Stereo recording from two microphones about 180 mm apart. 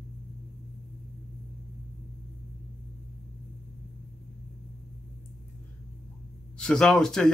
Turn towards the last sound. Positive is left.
turn(degrees=5)  # may be behind; listen again after turning